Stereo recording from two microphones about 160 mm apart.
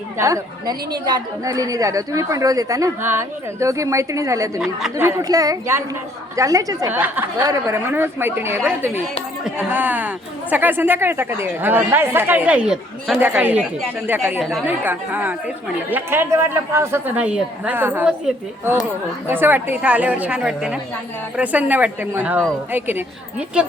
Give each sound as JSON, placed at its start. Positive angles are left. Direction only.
{"t": 0.2, "sound": "a woman's voice", "side_deg": -20}
{"t": 19.3, "sound": "speech", "side_deg": -15}